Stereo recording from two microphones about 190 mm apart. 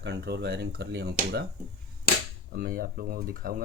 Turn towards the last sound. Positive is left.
turn(degrees=-50)  # may be behind; listen again after turning